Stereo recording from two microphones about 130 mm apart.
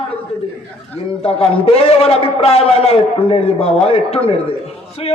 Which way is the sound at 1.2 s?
50° left (ahead or behind).